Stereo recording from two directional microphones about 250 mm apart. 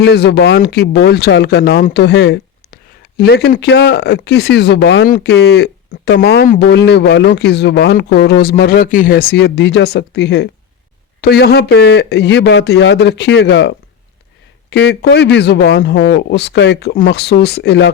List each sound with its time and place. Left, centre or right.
0.0 s speech: left